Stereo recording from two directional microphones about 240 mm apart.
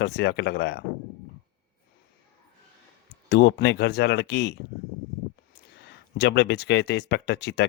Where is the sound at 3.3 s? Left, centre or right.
Left.